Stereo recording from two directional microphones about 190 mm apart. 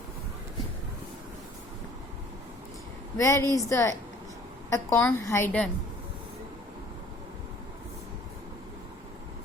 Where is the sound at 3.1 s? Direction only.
15° left (ahead or behind).